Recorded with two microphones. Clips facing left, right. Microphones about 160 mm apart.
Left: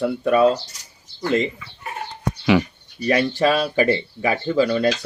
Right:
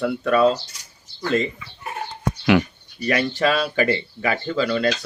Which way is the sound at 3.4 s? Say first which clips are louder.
Left 1 dB; 15° left (ahead or behind).